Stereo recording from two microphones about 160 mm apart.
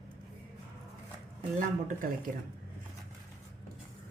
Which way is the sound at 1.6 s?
55° right (ahead or behind).